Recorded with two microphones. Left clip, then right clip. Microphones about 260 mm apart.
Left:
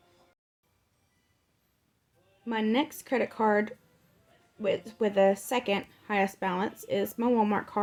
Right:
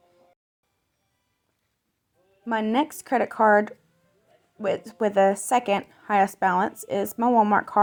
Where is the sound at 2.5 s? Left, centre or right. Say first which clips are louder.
Right 5 dB; right.